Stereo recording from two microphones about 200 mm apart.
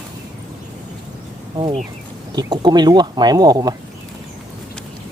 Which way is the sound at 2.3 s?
20° right (ahead or behind).